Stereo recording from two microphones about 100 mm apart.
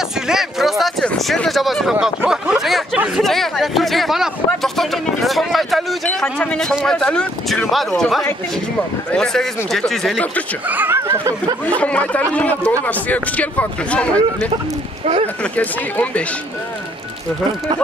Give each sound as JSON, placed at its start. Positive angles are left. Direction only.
{"t": 0.3, "sound": "a sound", "side_deg": -5}
{"t": 1.0, "sound": "speech", "side_deg": 5}
{"t": 4.7, "sound": "a sound", "side_deg": 0}
{"t": 6.0, "sound": "speech", "side_deg": 10}
{"t": 10.7, "sound": "speech", "side_deg": -20}
{"t": 11.6, "sound": "speech", "side_deg": 15}
{"t": 15.5, "sound": "speech", "side_deg": 15}